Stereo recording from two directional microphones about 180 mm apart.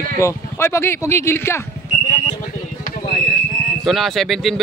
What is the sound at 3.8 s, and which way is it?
Speech, centre (ahead or behind).